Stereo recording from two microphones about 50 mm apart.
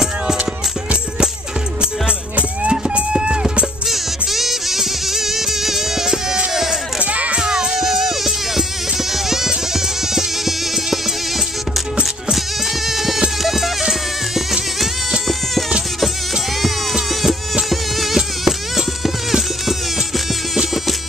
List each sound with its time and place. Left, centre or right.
1.8 s music: right
3.8 s music: centre
6.5 s sheep: centre
7.0 s music: right
7.4 s music: centre
12.8 s a sound: centre
13.4 s music: centre
17.1 s insect: centre
17.6 s music: centre
20.5 s music: centre